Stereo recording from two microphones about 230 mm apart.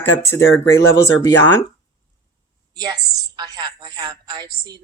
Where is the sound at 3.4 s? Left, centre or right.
Centre.